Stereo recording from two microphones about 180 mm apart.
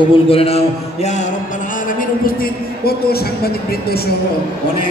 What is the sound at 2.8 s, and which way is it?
Speech, 60° left (ahead or behind).